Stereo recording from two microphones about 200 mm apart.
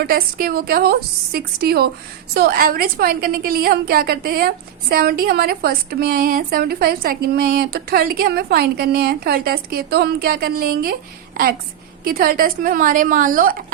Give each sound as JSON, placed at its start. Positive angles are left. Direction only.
{"t": 0.1, "sound": "a woman's voice", "side_deg": -50}
{"t": 12.0, "sound": "a woman's voice", "side_deg": -50}